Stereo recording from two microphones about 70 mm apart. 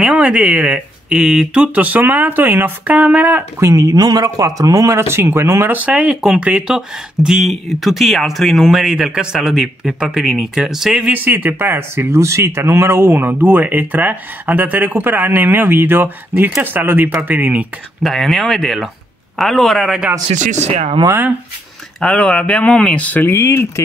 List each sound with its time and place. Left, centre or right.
0.0 s speech: centre
3.5 s speech: right
5.7 s speech: right
5.9 s speech: centre
7.2 s speech: centre
11.1 s speech: right
18.0 s speech: centre
22.0 s speech: centre
23.3 s speech: left